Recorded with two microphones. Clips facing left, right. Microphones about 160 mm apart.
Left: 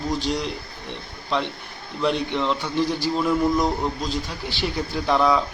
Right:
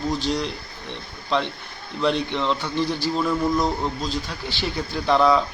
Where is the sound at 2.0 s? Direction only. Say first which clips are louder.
Even; 10° left (ahead or behind).